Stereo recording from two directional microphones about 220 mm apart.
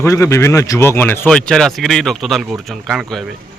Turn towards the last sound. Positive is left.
turn(degrees=0)  # may be behind; listen again after turning